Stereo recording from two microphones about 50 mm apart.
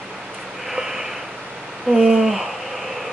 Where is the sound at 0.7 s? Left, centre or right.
Centre.